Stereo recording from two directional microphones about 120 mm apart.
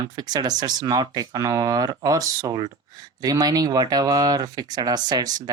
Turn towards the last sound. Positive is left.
turn(degrees=-35)  # may be behind; listen again after turning